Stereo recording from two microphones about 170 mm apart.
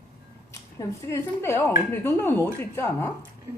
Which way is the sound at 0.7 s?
15° left (ahead or behind).